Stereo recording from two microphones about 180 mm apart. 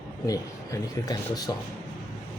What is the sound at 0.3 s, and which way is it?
Speech, 20° left (ahead or behind).